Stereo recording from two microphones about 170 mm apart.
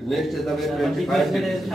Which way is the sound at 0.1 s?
Centre (ahead or behind).